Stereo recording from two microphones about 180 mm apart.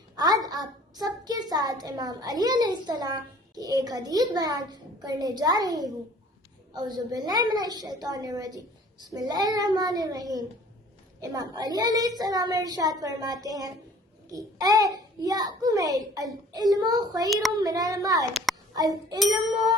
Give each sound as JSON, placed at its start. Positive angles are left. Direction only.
{"t": 0.2, "sound": "a child's voice", "side_deg": -20}
{"t": 17.2, "sound": "child singing", "side_deg": 0}
{"t": 17.6, "sound": "a woman's voice", "side_deg": -20}